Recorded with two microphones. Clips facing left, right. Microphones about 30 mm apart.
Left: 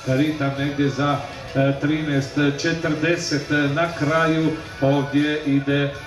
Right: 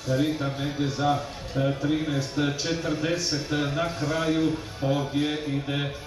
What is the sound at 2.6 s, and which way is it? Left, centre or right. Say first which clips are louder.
A man's voice: left 6 dB; left.